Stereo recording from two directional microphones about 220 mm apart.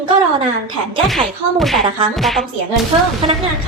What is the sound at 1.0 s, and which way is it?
Speech, centre (ahead or behind).